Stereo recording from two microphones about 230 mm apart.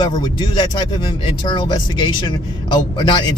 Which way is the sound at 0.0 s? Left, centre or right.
Centre.